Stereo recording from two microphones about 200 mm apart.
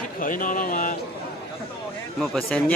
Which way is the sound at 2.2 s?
Centre (ahead or behind).